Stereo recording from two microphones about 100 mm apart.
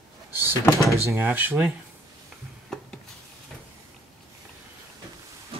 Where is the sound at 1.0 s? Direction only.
20° right (ahead or behind).